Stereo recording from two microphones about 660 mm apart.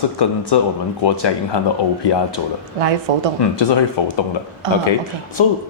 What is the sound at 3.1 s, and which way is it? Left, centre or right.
Speech, right.